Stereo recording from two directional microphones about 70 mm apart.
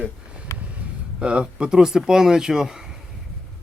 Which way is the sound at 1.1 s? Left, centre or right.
Centre.